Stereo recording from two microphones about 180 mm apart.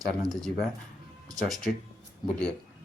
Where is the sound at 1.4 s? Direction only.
Centre (ahead or behind).